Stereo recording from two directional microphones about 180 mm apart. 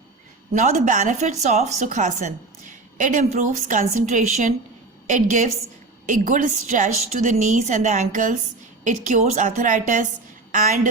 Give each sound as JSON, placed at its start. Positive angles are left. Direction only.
{"t": 0.5, "sound": "a woman's voice", "side_deg": -45}